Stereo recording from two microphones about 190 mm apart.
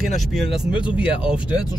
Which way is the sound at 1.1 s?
30° left (ahead or behind).